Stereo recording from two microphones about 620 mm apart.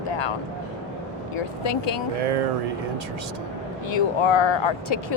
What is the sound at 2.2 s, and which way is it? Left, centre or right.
Speech, right.